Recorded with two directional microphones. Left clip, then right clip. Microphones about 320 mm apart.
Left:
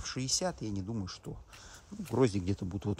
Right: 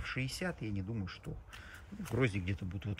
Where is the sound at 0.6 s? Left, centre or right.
Left.